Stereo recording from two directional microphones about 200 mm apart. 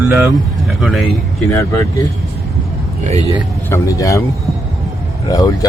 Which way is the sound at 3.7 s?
15° left (ahead or behind).